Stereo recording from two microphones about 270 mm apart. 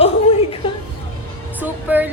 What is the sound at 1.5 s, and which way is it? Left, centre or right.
Speech, centre.